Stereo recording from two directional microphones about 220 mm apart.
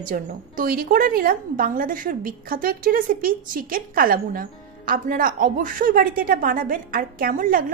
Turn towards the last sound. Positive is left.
turn(degrees=-40)  # may be behind; listen again after turning